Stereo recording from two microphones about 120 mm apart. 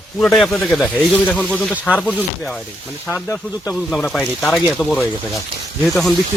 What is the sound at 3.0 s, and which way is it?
Speech, 20° left (ahead or behind).